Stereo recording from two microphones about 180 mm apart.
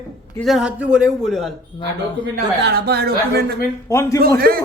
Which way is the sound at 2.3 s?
60° right (ahead or behind).